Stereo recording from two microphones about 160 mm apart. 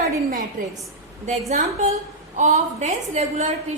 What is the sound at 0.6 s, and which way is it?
Speech, 55° right (ahead or behind).